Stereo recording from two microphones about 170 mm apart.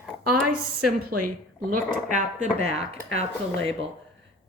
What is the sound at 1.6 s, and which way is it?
Speech, 50° right (ahead or behind).